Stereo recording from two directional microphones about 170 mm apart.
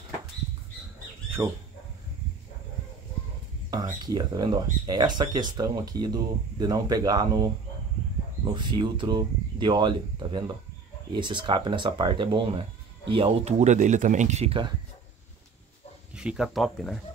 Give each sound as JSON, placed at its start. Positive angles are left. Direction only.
{"t": 1.4, "sound": "speech", "side_deg": -20}
{"t": 3.7, "sound": "speech", "side_deg": -25}
{"t": 16.1, "sound": "speech", "side_deg": -5}